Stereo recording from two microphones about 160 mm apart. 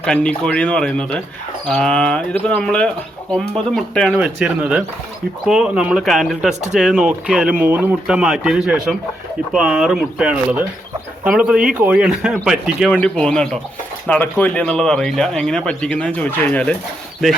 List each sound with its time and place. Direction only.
0.0 s speech: 5° left (ahead or behind)
6.5 s speech: 45° right (ahead or behind)
6.7 s speech: 5° right (ahead or behind)